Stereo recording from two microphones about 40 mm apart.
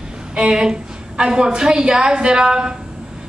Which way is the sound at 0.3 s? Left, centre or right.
Right.